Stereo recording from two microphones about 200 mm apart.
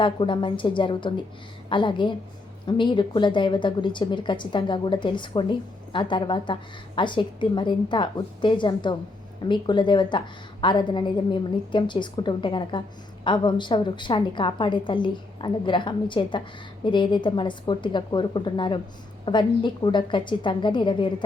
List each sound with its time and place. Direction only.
0.0 s speech: 25° left (ahead or behind)